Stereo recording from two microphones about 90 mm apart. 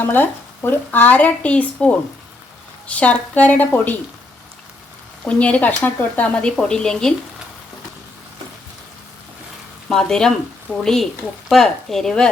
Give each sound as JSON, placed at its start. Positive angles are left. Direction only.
{"t": 0.0, "sound": "speech", "side_deg": 20}
{"t": 5.2, "sound": "speech", "side_deg": 15}
{"t": 9.9, "sound": "speech", "side_deg": 5}